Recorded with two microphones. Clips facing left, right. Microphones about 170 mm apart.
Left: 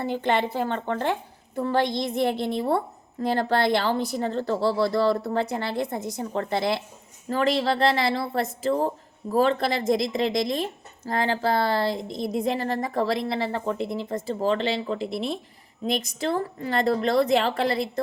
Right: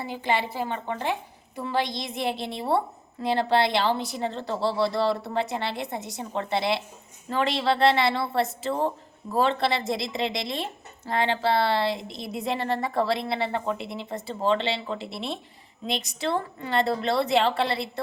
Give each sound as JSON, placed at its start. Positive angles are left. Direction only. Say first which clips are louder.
{"t": 0.0, "sound": "a woman's voice", "louder": "left 3 dB", "side_deg": 55}